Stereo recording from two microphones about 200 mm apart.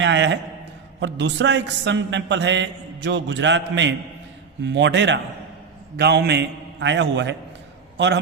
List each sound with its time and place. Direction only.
0.0 s a man's voice: 65° right (ahead or behind)